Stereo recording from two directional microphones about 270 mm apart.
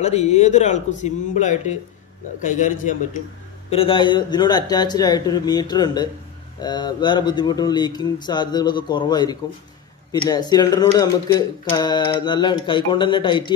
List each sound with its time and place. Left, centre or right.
0.0 s speech: left